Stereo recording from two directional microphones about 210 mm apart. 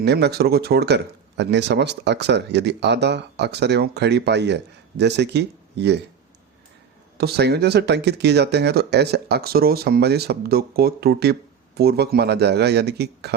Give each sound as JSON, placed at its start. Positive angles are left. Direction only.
{"t": 0.0, "sound": "speech", "side_deg": -50}
{"t": 7.2, "sound": "speech", "side_deg": -50}